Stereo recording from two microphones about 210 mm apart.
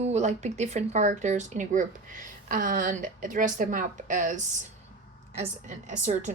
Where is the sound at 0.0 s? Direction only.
30° right (ahead or behind).